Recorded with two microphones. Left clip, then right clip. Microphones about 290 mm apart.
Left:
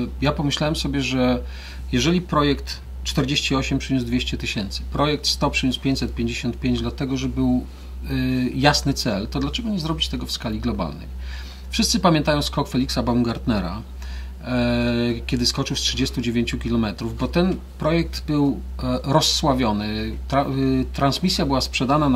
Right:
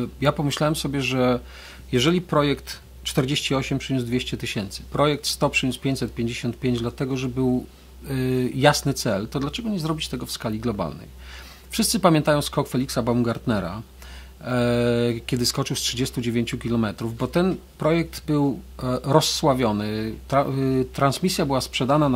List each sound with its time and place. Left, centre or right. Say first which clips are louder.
0.0 s speech: even; right